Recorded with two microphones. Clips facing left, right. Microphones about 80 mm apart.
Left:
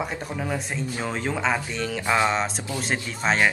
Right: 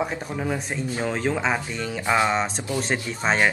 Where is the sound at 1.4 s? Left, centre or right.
Centre.